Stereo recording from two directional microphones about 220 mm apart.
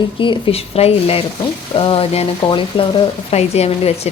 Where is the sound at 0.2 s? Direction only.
25° left (ahead or behind).